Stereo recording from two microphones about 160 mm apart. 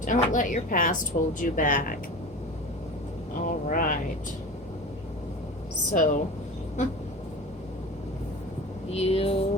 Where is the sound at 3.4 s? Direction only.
60° left (ahead or behind).